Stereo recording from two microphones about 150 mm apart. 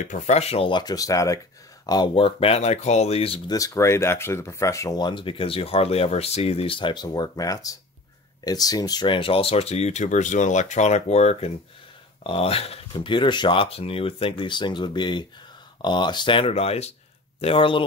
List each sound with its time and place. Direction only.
0.1 s speech: 45° left (ahead or behind); by 1.4 s 20° left (ahead or behind)
1.9 s speech: 30° left (ahead or behind)
3.4 s speech: 25° left (ahead or behind)